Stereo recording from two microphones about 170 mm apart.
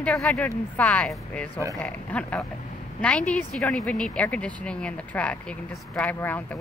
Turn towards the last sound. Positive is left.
turn(degrees=10)  # may be behind; listen again after turning